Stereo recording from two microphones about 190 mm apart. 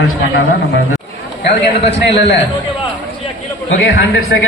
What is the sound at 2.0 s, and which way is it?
Speech, 65° left (ahead or behind).